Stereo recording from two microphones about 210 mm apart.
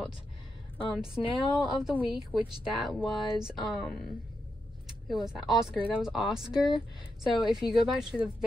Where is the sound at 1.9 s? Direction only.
25° left (ahead or behind).